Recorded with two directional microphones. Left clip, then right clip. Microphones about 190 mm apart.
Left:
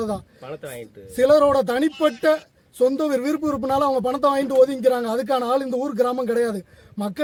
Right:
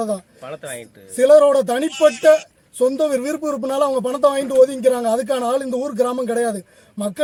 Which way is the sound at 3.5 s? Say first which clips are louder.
Right 2 dB; 30° left (ahead or behind).